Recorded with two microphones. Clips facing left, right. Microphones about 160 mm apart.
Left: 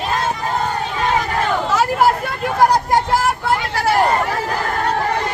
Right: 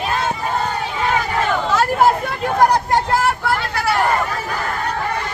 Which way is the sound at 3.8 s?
45° left (ahead or behind).